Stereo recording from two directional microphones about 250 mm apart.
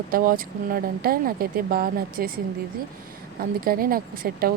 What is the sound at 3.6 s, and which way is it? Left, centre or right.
Speech, right.